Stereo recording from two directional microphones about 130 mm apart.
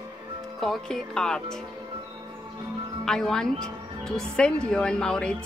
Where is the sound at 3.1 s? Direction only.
5° left (ahead or behind).